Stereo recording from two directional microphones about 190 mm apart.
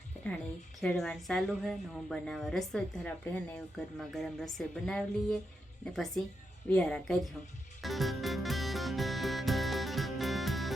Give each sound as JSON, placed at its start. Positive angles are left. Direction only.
{"t": 0.8, "sound": "a woman's voice", "side_deg": 5}
{"t": 7.8, "sound": "music", "side_deg": 0}